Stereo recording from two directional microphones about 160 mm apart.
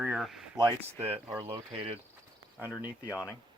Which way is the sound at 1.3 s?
15° right (ahead or behind).